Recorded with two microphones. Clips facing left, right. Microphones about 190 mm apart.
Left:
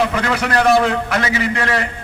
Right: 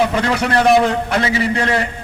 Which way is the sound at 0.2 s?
30° right (ahead or behind).